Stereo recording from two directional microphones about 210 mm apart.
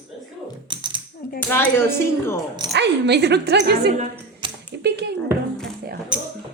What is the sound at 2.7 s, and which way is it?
Speech, 55° right (ahead or behind).